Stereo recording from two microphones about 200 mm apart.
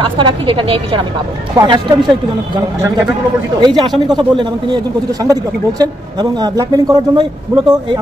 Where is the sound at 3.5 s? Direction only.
20° right (ahead or behind).